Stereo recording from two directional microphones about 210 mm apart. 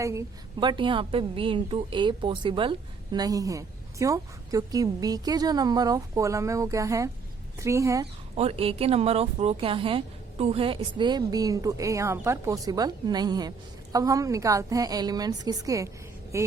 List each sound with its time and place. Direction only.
0.0 s a woman's voice: 15° right (ahead or behind)
8.4 s a woman's voice: 30° right (ahead or behind)